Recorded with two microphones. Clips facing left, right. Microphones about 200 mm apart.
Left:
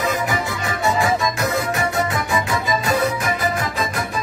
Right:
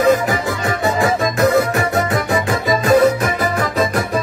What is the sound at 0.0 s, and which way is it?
Music, 50° right (ahead or behind).